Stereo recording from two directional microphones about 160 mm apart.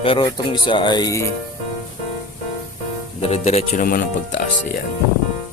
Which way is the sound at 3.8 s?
60° left (ahead or behind).